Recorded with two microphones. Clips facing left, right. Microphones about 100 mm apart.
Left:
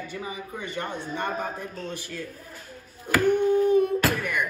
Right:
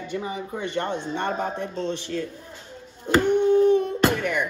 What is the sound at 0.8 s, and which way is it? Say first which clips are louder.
Speech: right 4 dB; 25° right (ahead or behind).